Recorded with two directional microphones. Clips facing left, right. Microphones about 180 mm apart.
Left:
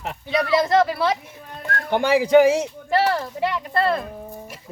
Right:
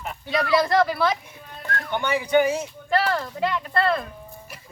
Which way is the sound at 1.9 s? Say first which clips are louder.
Left 6 dB; 85° left.